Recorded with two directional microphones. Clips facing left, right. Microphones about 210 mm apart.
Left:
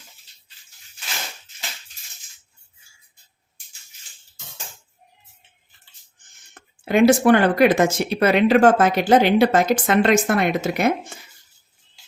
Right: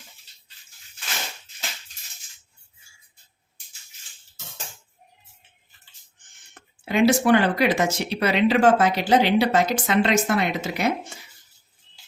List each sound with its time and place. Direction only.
6.5 s speech: 50° left (ahead or behind)